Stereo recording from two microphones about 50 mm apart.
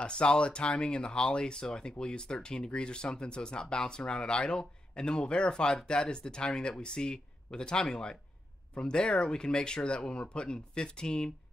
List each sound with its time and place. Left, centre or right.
0.0 s speech: centre